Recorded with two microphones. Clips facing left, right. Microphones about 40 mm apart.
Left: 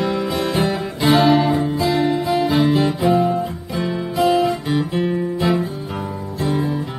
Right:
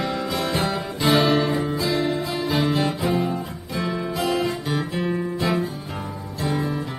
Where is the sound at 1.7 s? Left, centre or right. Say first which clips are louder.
Left 5 dB; left.